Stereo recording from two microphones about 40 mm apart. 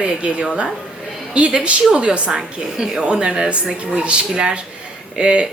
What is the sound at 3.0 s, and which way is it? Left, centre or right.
Speech, right.